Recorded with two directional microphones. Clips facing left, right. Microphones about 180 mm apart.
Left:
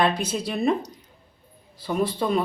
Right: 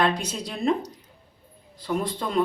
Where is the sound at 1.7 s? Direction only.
5° left (ahead or behind).